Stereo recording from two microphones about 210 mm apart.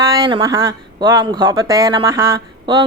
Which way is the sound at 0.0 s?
15° right (ahead or behind).